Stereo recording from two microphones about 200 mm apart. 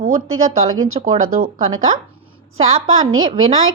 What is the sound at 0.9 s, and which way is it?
Speech, 35° right (ahead or behind).